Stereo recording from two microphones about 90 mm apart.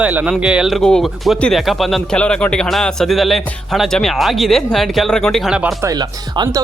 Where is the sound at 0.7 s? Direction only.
5° left (ahead or behind).